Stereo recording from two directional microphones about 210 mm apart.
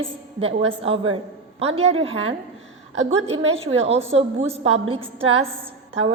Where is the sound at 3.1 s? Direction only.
30° right (ahead or behind).